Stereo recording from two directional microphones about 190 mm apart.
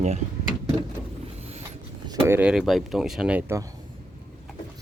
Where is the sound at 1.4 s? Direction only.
35° right (ahead or behind).